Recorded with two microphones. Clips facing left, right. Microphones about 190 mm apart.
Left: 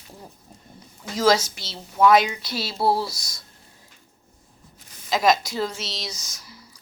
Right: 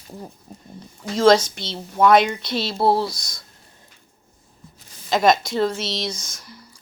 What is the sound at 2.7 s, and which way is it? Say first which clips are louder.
Speech: right 3 dB; 25° right (ahead or behind).